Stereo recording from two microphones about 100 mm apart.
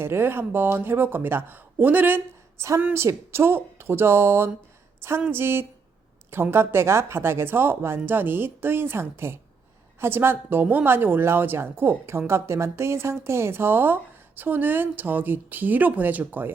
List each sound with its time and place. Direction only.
0.0 s a woman's voice: 25° right (ahead or behind)